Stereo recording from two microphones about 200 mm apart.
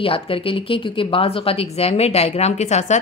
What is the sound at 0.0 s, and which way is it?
A woman's voice, 25° left (ahead or behind).